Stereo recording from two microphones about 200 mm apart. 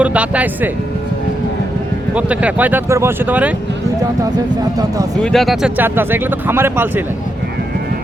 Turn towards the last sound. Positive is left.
turn(degrees=-10)  # may be behind; listen again after turning